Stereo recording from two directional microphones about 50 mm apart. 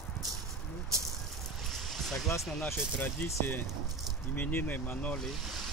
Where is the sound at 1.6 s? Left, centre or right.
Centre.